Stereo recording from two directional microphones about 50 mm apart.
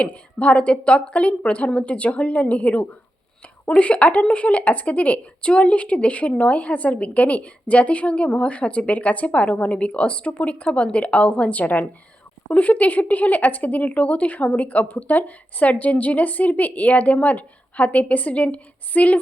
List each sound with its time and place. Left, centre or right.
0.0 s a woman's voice: left